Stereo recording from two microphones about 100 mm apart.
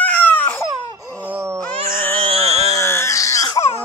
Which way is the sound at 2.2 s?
80° right.